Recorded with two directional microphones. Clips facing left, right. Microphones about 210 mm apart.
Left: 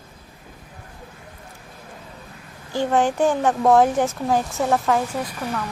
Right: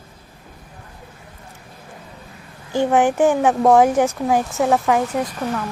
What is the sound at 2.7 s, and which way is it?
A child's voice, 15° right (ahead or behind).